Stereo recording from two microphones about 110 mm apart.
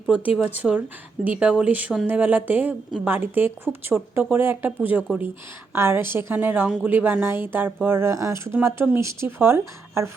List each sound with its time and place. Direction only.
0.3 s a woman's voice: 15° right (ahead or behind)